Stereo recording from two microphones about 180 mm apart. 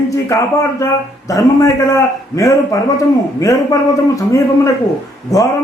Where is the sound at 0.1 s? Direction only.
15° left (ahead or behind).